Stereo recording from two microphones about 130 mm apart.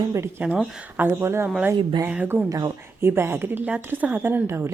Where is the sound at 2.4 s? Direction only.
25° right (ahead or behind).